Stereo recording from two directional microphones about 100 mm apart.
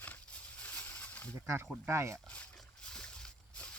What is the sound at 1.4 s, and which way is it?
Speech, 25° right (ahead or behind).